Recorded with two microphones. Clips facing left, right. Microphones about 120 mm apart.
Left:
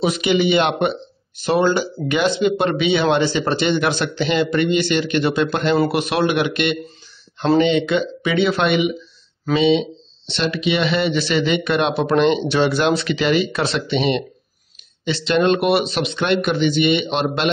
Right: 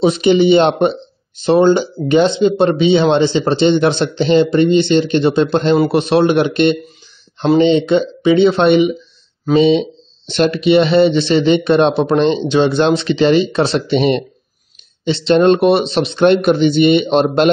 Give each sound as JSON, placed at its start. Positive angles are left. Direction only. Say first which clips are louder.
{"t": 0.0, "sound": "speech", "louder": "right 6 dB", "side_deg": -30}
{"t": 15.0, "sound": "speech", "louder": "right 6 dB", "side_deg": -30}